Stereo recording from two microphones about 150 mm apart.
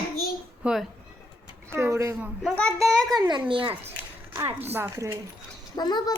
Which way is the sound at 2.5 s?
5° left (ahead or behind).